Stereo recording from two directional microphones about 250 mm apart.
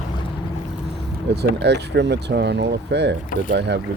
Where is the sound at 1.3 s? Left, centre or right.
Right.